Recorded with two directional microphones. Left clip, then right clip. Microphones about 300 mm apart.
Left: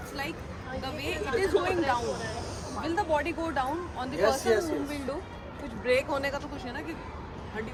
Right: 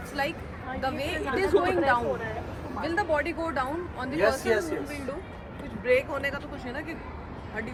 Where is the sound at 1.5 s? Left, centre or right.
Right.